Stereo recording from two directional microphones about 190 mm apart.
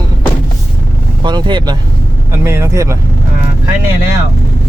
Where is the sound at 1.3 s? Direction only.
25° right (ahead or behind).